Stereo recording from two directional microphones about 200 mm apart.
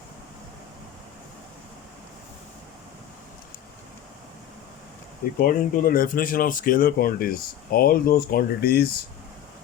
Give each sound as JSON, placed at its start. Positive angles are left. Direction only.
{"t": 5.4, "sound": "speech", "side_deg": 45}